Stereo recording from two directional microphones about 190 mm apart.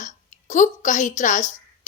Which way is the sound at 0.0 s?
40° left (ahead or behind).